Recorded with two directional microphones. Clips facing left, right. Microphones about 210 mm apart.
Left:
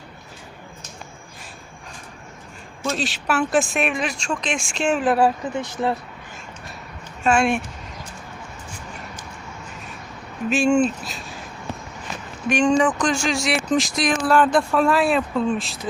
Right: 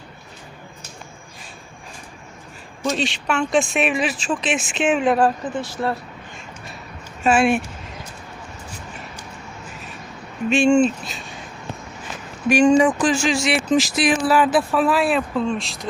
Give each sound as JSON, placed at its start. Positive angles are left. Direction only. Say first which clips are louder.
{"t": 2.9, "sound": "speech", "louder": "even", "side_deg": 0}
{"t": 5.6, "sound": "speech", "louder": "left 2 dB", "side_deg": 20}
{"t": 7.3, "sound": "speech", "louder": "right 2 dB", "side_deg": -5}
{"t": 10.5, "sound": "speech", "louder": "right 3 dB", "side_deg": 0}
{"t": 12.5, "sound": "speech", "louder": "right 4 dB", "side_deg": -10}